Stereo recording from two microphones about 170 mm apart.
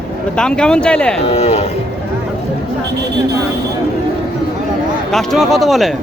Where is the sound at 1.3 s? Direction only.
35° left (ahead or behind).